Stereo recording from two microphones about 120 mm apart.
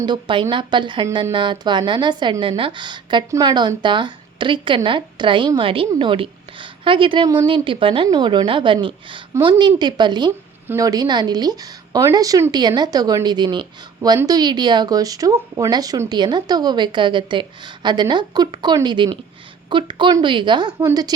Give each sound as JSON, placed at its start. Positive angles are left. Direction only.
{"t": 0.0, "sound": "a woman's voice", "side_deg": -40}
{"t": 8.0, "sound": "a woman's voice", "side_deg": -35}
{"t": 20.7, "sound": "a woman's voice", "side_deg": -30}